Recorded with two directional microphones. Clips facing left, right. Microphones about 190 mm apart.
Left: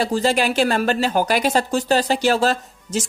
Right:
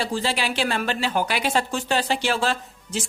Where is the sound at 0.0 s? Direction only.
45° left (ahead or behind).